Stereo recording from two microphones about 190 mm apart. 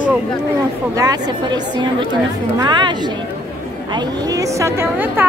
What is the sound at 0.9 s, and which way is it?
A woman's voice, 20° right (ahead or behind).